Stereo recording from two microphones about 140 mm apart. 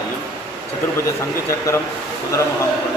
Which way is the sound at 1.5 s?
20° left (ahead or behind).